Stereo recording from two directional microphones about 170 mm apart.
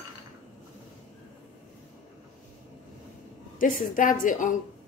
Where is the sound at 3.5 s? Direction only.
50° left (ahead or behind).